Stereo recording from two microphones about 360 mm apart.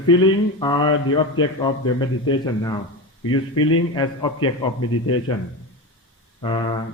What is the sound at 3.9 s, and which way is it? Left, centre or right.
Speech, centre.